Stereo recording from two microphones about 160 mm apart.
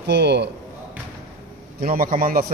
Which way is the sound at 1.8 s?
65° right (ahead or behind).